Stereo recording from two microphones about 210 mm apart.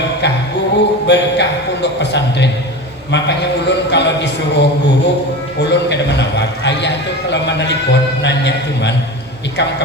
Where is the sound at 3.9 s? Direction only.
55° left (ahead or behind).